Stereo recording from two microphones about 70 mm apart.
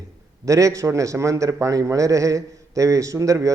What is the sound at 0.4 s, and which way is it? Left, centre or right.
A man's voice, right.